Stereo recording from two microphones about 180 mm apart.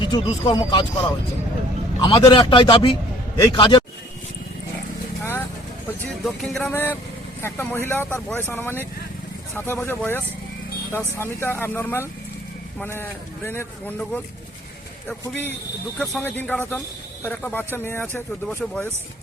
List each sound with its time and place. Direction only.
0.0 s a man's voice: 25° left (ahead or behind)
2.0 s a man's voice: 30° left (ahead or behind)
5.2 s vehicle: 10° left (ahead or behind)
6.0 s speech: 5° left (ahead or behind)
15.3 s speech: 10° left (ahead or behind)